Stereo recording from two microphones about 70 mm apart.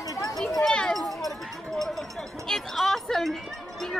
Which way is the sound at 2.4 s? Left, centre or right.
Centre.